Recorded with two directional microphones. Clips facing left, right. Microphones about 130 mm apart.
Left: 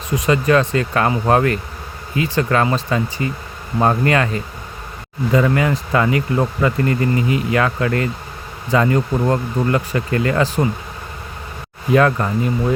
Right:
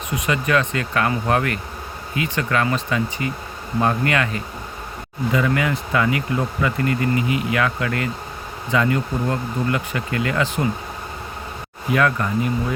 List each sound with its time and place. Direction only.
0.3 s speech: 35° left (ahead or behind)
11.9 s speech: 35° left (ahead or behind)